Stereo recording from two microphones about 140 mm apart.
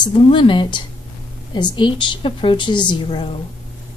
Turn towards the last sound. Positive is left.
turn(degrees=40)  # may be behind; listen again after turning